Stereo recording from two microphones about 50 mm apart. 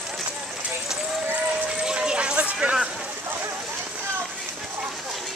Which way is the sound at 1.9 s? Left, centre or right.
Centre.